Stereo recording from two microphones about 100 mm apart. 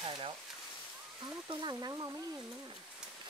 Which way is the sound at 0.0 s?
55° right (ahead or behind).